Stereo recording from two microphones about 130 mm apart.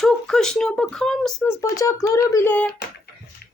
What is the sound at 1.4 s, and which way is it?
Speech, 25° left (ahead or behind).